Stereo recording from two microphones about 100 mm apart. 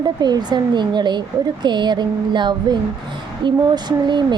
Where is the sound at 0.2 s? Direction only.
45° right (ahead or behind).